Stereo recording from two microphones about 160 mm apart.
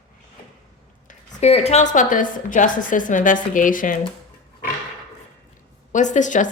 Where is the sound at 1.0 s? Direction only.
40° left (ahead or behind); by 3.9 s 55° left (ahead or behind).